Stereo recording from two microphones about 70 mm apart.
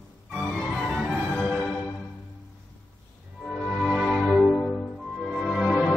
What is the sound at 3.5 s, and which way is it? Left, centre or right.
Music, centre.